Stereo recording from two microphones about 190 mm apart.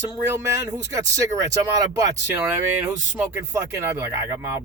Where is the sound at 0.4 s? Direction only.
15° right (ahead or behind).